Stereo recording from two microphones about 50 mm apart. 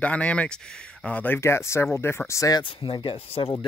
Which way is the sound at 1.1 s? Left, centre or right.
Left.